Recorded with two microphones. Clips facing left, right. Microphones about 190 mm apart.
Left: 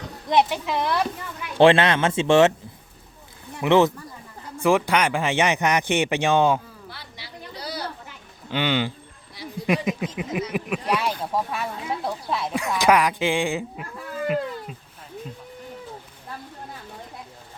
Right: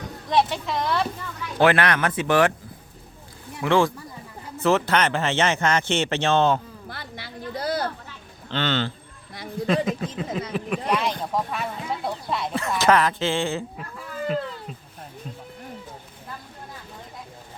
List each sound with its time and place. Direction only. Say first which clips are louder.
0.3 s speech: left 2 dB; 15° left (ahead or behind)
1.5 s speech: left 4 dB; 25° left (ahead or behind)
3.6 s speech: left 3 dB; 20° left (ahead or behind)
6.8 s a sound: right 4 dB; 50° right (ahead or behind)
8.4 s speech: left 2 dB; 10° left (ahead or behind)
12.8 s speech: left 1 dB; 15° left (ahead or behind)
14.3 s cat: left 2 dB; 10° left (ahead or behind)